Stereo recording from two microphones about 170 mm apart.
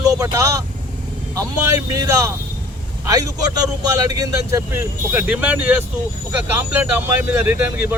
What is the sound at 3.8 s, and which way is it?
Speech, 20° right (ahead or behind).